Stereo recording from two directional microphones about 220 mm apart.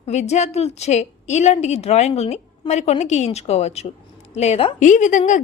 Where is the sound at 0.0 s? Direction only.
30° left (ahead or behind).